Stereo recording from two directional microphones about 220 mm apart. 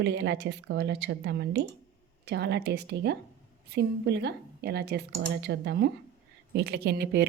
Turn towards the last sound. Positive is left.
turn(degrees=-45)  # may be behind; listen again after turning